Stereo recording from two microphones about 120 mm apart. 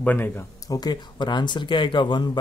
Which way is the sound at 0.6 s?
30° left (ahead or behind).